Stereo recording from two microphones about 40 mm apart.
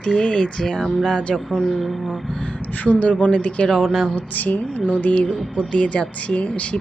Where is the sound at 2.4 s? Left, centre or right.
Left.